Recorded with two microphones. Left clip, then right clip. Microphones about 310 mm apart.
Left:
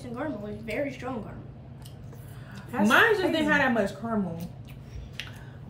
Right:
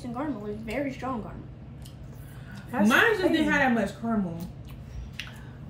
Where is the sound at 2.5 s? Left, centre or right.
Centre.